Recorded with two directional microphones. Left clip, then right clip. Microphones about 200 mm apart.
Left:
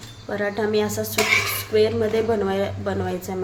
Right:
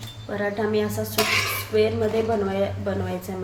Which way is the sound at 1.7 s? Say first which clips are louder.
Left 2 dB; 30° left (ahead or behind).